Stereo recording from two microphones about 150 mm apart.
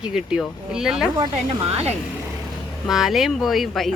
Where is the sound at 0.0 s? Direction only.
5° right (ahead or behind).